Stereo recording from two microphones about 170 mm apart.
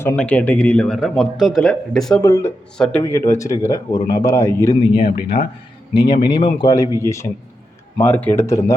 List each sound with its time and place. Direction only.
0.2 s a man's voice: 10° left (ahead or behind)
2.2 s speech: 15° left (ahead or behind)
2.7 s a man's voice: 5° left (ahead or behind)
3.0 s speech: 15° left (ahead or behind)
4.9 s speech: 65° left (ahead or behind)
6.1 s speech: 25° left (ahead or behind)